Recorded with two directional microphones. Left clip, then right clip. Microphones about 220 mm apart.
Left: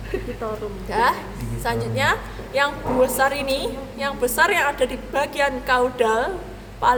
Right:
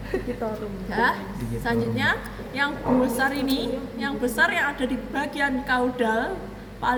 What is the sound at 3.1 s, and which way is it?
A woman's voice, 55° left (ahead or behind).